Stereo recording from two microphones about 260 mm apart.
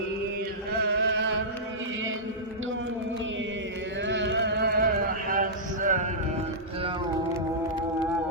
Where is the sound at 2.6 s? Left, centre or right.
Right.